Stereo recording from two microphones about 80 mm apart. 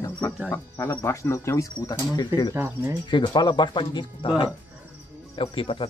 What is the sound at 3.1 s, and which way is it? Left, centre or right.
Speech, left.